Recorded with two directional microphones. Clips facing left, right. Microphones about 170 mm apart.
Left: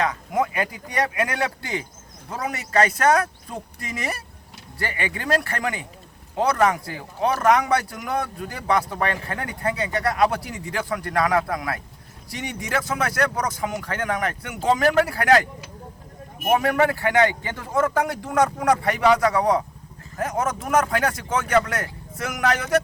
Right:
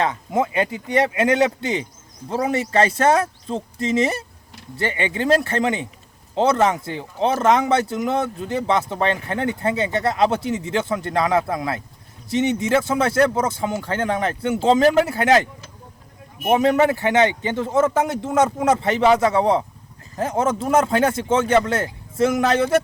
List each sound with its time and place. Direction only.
0.0 s speech: 25° right (ahead or behind)
16.5 s speech: 20° right (ahead or behind)